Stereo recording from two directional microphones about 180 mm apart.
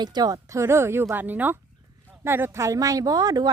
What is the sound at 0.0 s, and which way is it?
A woman's voice, 20° right (ahead or behind).